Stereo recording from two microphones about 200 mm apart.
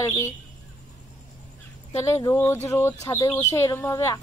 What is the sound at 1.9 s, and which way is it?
Speech, 15° left (ahead or behind).